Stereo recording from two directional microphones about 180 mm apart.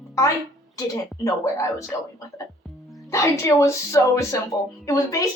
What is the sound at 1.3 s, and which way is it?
Speech, 20° left (ahead or behind).